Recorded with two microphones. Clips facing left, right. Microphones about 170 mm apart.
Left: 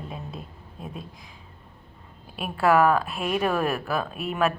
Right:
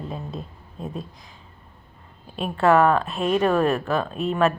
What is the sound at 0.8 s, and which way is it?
Speech, 40° right (ahead or behind).